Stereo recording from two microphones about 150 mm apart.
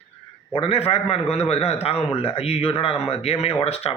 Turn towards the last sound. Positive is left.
turn(degrees=40)  # may be behind; listen again after turning